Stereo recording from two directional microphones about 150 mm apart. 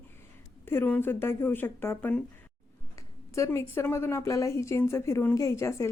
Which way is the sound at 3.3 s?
20° left (ahead or behind).